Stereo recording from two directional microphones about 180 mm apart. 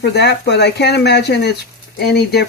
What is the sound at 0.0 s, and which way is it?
Speech, 65° left (ahead or behind).